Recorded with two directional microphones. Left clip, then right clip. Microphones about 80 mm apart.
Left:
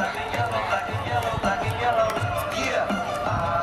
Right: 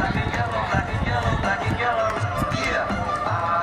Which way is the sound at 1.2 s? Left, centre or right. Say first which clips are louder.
Right 1 dB; right.